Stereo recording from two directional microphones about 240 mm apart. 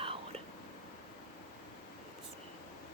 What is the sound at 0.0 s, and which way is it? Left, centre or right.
Whispering, right.